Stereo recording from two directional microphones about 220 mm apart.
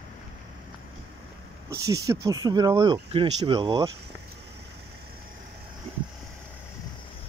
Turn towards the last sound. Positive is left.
turn(degrees=-25)  # may be behind; listen again after turning